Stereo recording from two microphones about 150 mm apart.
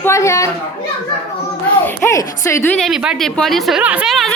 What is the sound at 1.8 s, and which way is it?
Speech, 15° left (ahead or behind).